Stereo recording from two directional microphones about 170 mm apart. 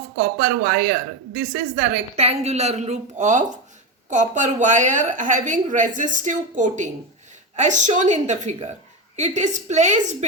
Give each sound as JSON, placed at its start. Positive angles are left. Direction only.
{"t": 0.2, "sound": "a woman's voice", "side_deg": -65}
{"t": 1.7, "sound": "a woman's voice", "side_deg": -40}